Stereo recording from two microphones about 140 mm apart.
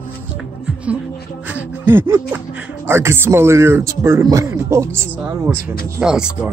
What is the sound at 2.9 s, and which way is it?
Speech, 15° right (ahead or behind).